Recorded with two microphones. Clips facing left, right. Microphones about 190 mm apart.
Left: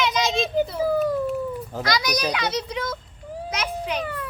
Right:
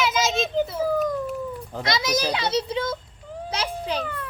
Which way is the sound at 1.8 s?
25° right (ahead or behind).